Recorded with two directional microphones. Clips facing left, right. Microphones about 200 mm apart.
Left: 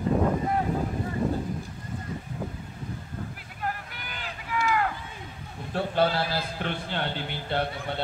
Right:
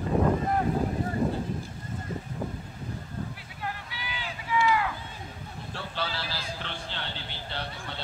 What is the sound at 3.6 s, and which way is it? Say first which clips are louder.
Vehicle: left 3 dB; 50° left (ahead or behind).